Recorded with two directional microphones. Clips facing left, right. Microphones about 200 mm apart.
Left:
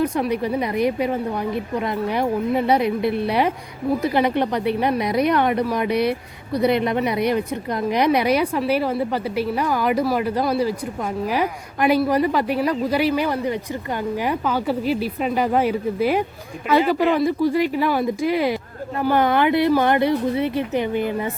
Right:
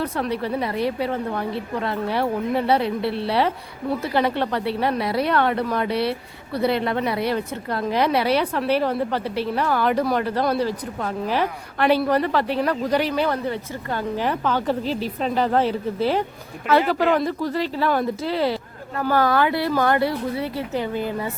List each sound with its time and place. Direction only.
0.0 s a woman's voice: 15° left (ahead or behind)